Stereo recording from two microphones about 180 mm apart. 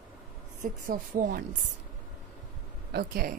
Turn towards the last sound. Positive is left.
turn(degrees=-55)  # may be behind; listen again after turning